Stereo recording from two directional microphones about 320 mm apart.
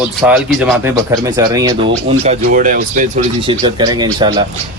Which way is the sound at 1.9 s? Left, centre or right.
Right.